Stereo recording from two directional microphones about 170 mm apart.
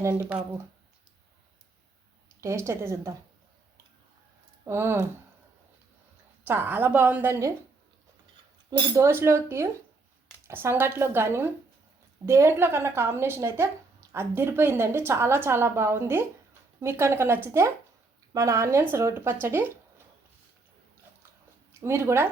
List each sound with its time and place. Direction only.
0.0 s a woman's voice: 10° right (ahead or behind)
2.4 s a woman's voice: 15° right (ahead or behind)
4.6 s a woman's voice: 15° right (ahead or behind)
6.4 s a woman's voice: 10° right (ahead or behind)
9.0 s a woman's voice: 15° right (ahead or behind)
21.7 s speech: 15° right (ahead or behind)